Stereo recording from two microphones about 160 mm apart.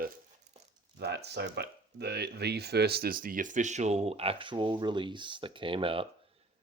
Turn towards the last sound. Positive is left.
turn(degrees=-30)  # may be behind; listen again after turning